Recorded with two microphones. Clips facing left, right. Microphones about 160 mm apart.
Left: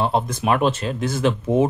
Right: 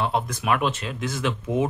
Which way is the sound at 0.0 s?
30° left (ahead or behind).